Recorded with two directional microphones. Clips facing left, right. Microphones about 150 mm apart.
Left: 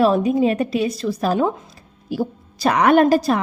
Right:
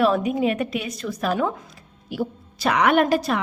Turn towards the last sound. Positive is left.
turn(degrees=40)  # may be behind; listen again after turning